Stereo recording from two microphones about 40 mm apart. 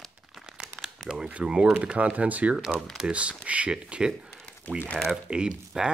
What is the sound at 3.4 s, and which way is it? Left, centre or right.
Speech, right.